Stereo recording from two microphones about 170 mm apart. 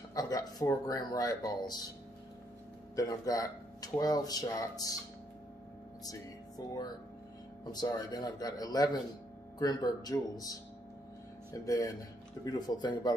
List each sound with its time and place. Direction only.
0.1 s speech: 20° left (ahead or behind)
3.0 s a man's voice: 20° left (ahead or behind)
6.6 s a man's voice: 20° left (ahead or behind)
11.6 s a man's voice: 20° left (ahead or behind)